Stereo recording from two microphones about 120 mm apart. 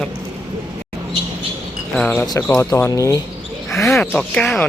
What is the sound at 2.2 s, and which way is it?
Speech, 35° left (ahead or behind).